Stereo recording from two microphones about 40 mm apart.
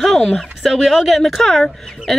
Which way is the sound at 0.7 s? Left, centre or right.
Centre.